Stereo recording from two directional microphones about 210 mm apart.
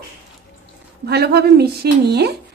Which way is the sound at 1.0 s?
50° right (ahead or behind).